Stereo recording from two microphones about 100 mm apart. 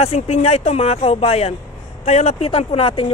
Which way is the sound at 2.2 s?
75° left (ahead or behind).